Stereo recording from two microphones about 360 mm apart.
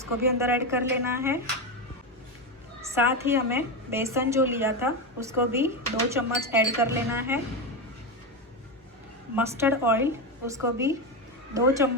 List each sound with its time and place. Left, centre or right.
0.0 s a woman's voice: centre
2.8 s a woman's voice: centre
9.3 s a woman's voice: centre